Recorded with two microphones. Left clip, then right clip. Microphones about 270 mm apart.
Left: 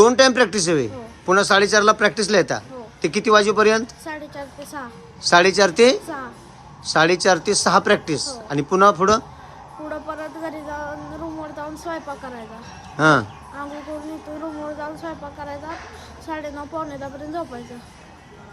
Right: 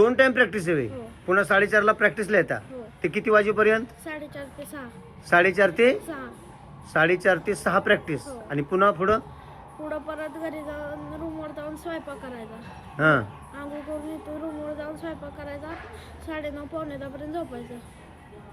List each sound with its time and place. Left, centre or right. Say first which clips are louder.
0.0 s a woman's voice: left 5 dB; centre
11.9 s speech: left 5 dB; centre
14.8 s speech: left 4 dB; centre